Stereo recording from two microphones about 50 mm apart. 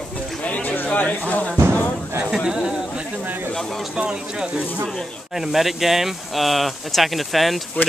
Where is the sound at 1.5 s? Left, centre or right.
Right.